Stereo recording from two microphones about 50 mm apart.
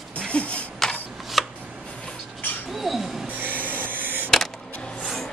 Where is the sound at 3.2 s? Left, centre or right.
Right.